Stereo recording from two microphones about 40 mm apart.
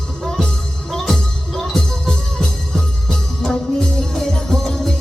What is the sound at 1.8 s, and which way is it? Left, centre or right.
Music, left.